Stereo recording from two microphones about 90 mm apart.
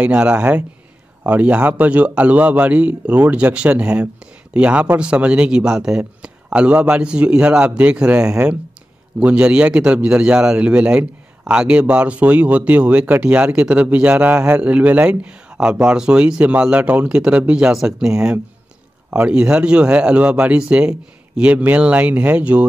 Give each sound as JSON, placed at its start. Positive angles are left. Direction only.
{"t": 0.0, "sound": "a man's voice", "side_deg": -15}